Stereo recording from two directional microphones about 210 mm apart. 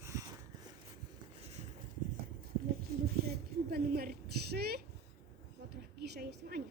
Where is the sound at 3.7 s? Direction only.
45° right (ahead or behind).